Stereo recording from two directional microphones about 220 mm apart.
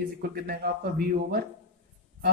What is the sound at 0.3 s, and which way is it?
A man's voice, 45° right (ahead or behind).